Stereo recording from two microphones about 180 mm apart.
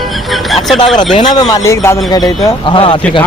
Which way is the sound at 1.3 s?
20° left (ahead or behind).